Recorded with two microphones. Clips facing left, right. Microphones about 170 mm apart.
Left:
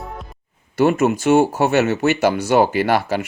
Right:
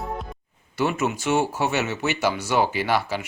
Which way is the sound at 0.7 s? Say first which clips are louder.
Left 8 dB; 50° left (ahead or behind).